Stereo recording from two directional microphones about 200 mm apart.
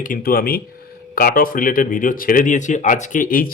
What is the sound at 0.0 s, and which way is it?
A man's voice, 45° left (ahead or behind).